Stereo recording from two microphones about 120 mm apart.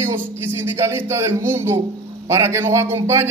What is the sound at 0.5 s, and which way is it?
Speech, 20° right (ahead or behind).